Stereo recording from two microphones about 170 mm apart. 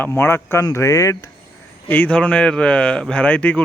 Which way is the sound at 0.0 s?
15° left (ahead or behind).